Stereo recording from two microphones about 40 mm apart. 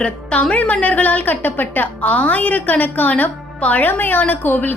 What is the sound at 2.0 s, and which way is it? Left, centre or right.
A woman's voice, left.